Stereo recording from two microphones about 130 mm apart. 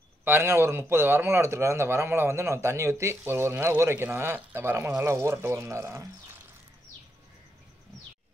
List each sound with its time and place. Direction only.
0.2 s speech: 15° right (ahead or behind)